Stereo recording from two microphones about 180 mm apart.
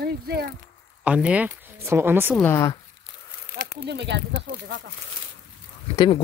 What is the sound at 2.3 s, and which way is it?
Speech, 15° left (ahead or behind).